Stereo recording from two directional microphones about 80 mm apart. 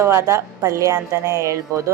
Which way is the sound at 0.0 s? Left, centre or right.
Right.